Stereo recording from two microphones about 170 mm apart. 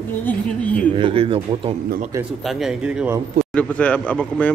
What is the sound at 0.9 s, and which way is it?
Speech, 30° right (ahead or behind).